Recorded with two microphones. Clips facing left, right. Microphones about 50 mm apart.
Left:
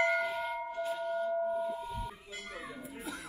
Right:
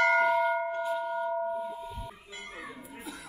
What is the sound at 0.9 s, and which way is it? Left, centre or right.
Singing bowl, centre.